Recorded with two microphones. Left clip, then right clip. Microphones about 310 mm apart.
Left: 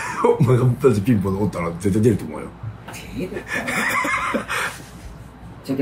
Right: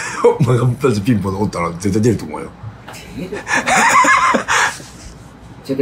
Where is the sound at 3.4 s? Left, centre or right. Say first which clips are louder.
Right 11 dB; centre.